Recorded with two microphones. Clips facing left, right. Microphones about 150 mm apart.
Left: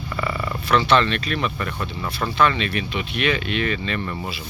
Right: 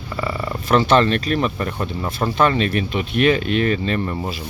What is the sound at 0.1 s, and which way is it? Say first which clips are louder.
Purr: right 2 dB; 25° right (ahead or behind).